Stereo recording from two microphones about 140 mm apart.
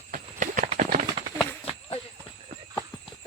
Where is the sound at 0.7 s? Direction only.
60° right (ahead or behind).